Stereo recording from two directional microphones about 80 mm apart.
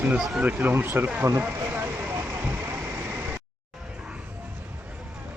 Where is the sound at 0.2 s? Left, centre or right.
Centre.